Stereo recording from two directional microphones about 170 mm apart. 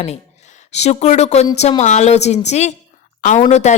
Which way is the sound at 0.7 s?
40° left (ahead or behind).